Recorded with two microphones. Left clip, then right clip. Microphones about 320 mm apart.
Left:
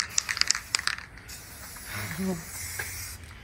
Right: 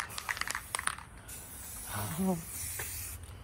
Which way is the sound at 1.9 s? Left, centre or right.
Centre.